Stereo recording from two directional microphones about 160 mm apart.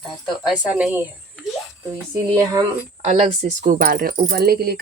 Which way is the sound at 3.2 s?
45° right (ahead or behind).